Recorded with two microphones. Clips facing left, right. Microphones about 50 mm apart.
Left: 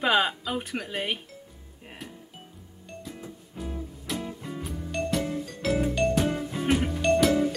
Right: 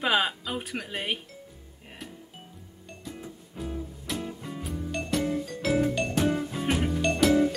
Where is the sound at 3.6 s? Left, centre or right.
Centre.